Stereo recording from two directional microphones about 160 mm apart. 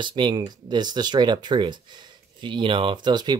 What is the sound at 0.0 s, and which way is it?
Speech, 30° right (ahead or behind).